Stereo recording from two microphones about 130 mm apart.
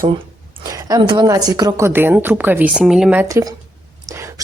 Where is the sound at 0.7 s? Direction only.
25° right (ahead or behind).